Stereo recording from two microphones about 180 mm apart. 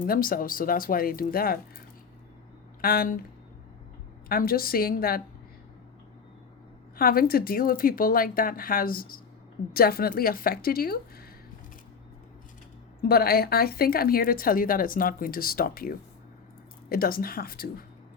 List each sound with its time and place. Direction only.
0.0 s speech: 50° left (ahead or behind)
2.8 s a woman's voice: 55° left (ahead or behind)
4.3 s a woman's voice: 55° left (ahead or behind)
6.9 s a woman's voice: 55° left (ahead or behind)
13.0 s a woman's voice: 60° left (ahead or behind)